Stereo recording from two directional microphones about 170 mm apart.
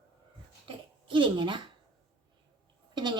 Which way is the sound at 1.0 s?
30° right (ahead or behind).